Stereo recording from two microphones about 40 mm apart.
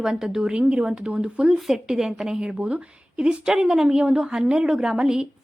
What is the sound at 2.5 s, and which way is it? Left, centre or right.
A woman's voice, right.